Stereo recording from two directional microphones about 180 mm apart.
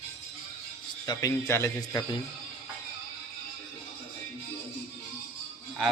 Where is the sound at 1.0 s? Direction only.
15° left (ahead or behind).